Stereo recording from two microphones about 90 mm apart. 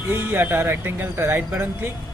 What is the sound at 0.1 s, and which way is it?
Speech, 25° right (ahead or behind).